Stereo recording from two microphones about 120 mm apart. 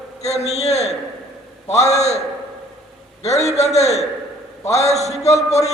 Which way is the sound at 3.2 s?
65° left (ahead or behind).